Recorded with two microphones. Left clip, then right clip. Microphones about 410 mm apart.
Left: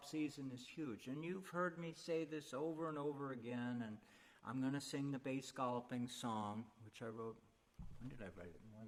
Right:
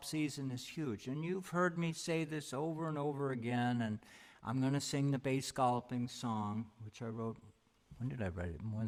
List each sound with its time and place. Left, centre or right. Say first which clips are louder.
0.0 s speech: right 6 dB; right
4.4 s speech: right 7 dB; right
5.9 s mantra: right 4 dB; right
7.0 s speech: right 5 dB; right
8.1 s speech: right 12 dB; right